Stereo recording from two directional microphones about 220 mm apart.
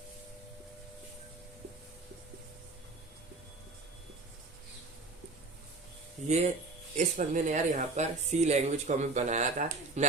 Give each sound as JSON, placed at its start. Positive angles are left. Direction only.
{"t": 6.2, "sound": "speech", "side_deg": -30}